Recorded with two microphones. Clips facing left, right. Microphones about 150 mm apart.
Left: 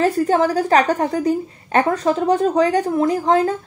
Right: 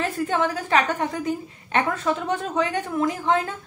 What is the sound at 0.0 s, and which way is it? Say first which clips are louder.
A woman's voice: left 7 dB; 40° left (ahead or behind).